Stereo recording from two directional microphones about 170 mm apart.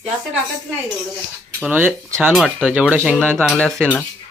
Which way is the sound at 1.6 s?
10° right (ahead or behind).